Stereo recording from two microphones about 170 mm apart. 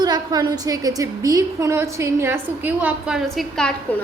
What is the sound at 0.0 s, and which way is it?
A woman's voice, 25° right (ahead or behind).